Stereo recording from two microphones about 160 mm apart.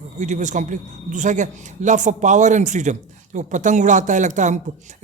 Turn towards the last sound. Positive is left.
turn(degrees=-50)  # may be behind; listen again after turning